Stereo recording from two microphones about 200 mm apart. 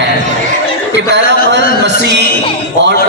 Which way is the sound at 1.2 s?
50° left (ahead or behind).